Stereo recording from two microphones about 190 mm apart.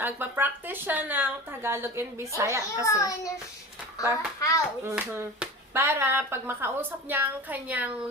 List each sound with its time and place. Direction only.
0.0 s a woman's voice: 10° right (ahead or behind)
2.8 s a child's voice: 15° left (ahead or behind)
4.8 s a woman's voice: 15° right (ahead or behind)